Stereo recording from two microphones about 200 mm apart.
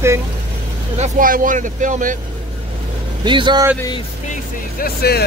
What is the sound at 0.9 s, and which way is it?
Speech, 40° right (ahead or behind).